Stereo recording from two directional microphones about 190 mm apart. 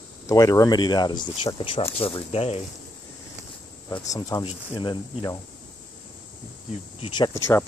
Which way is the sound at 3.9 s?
15° left (ahead or behind).